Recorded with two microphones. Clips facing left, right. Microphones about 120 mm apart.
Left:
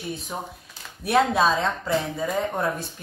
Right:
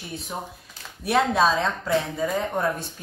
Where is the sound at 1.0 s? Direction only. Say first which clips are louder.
Even; centre (ahead or behind).